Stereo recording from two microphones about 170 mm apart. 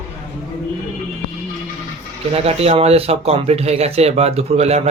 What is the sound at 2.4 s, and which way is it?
Speech, 35° right (ahead or behind).